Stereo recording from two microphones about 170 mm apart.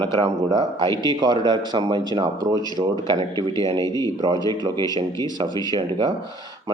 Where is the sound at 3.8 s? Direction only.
20° left (ahead or behind).